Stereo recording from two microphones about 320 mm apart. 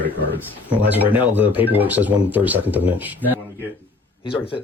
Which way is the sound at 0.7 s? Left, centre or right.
Centre.